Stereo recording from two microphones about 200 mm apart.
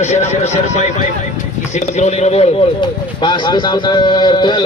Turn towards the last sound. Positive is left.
turn(degrees=20)  # may be behind; listen again after turning